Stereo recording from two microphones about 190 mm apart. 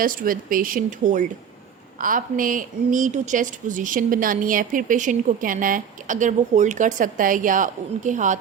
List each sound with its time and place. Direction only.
0.0 s a woman's voice: 45° right (ahead or behind)